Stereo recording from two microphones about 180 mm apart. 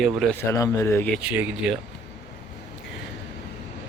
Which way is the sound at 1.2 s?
5° right (ahead or behind).